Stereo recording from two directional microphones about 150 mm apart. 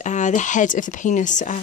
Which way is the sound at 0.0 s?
55° left (ahead or behind).